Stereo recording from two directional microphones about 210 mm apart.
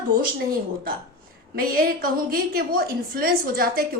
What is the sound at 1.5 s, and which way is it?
A woman's voice, 45° right (ahead or behind).